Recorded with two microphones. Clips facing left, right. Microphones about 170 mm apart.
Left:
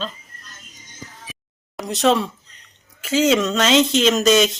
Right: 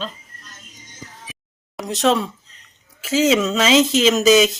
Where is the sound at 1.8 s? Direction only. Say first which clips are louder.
Even; centre (ahead or behind).